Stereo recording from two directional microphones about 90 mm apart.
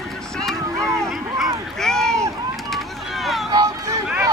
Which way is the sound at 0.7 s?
35° right (ahead or behind).